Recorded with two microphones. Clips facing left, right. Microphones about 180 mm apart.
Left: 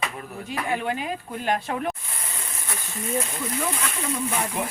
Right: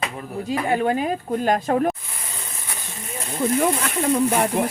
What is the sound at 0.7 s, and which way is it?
Speech, 40° right (ahead or behind).